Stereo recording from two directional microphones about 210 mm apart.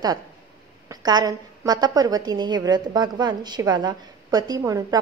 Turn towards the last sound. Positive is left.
turn(degrees=-15)  # may be behind; listen again after turning